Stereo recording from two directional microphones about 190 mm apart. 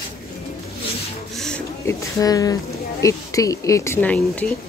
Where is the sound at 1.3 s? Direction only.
5° left (ahead or behind).